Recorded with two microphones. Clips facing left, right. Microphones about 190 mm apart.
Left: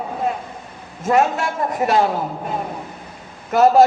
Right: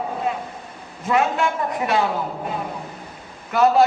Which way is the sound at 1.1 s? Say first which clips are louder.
Left 2 dB; 45° left (ahead or behind).